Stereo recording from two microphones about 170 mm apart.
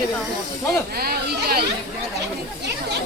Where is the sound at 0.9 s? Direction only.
65° right (ahead or behind).